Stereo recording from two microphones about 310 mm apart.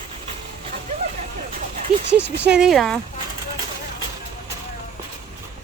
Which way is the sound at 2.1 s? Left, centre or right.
Right.